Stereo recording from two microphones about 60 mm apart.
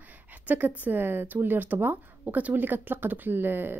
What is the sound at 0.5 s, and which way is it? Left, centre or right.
A woman's voice, right.